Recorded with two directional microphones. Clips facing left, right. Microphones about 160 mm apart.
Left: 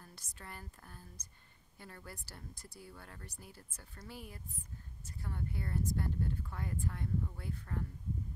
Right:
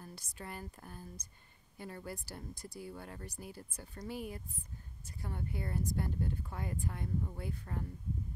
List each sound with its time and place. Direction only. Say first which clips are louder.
0.0 s speech: right 6 dB; 10° right (ahead or behind)